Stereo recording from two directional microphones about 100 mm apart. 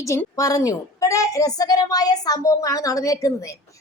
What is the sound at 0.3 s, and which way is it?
A woman's voice, 35° left (ahead or behind).